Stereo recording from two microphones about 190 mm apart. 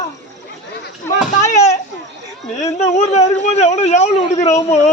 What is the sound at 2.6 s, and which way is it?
Speech, 35° left (ahead or behind).